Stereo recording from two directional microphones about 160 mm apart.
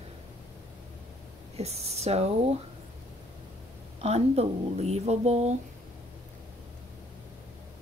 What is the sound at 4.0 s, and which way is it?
A woman's voice, 40° right (ahead or behind).